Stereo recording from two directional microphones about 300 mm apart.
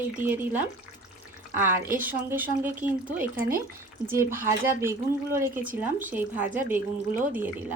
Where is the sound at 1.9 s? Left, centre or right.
Centre.